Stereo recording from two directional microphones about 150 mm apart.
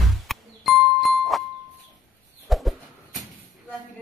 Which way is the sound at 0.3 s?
Centre (ahead or behind).